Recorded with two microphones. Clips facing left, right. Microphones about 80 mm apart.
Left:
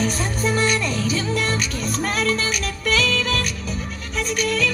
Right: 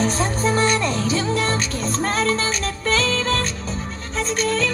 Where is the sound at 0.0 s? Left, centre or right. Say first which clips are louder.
Right 2 dB; right.